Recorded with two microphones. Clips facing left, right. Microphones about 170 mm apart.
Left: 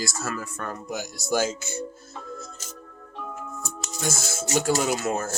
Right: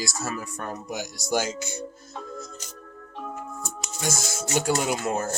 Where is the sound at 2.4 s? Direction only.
50° left (ahead or behind).